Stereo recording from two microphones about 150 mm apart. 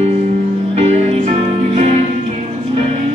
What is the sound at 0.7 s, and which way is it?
Music, 45° right (ahead or behind).